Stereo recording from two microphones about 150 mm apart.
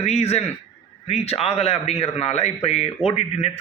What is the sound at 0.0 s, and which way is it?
A man's voice, 45° left (ahead or behind).